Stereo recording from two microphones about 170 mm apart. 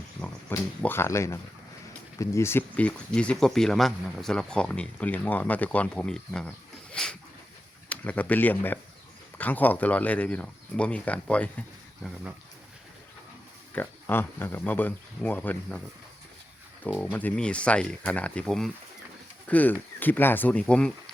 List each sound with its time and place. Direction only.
0.8 s speech: 15° left (ahead or behind)
6.9 s dog: 5° left (ahead or behind)
7.9 s speech: 10° left (ahead or behind)
13.7 s speech: 10° left (ahead or behind)
16.8 s speech: 10° left (ahead or behind)